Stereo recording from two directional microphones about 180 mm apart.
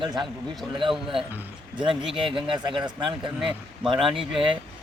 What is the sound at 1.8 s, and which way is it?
Speech, 25° right (ahead or behind).